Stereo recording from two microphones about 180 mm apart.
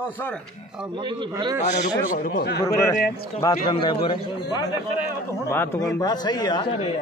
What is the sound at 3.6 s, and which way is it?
Speech, 30° left (ahead or behind).